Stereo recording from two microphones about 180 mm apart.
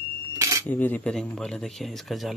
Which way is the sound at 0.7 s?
10° left (ahead or behind).